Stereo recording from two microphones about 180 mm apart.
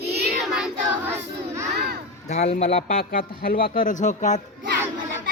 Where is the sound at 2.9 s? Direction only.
50° left (ahead or behind).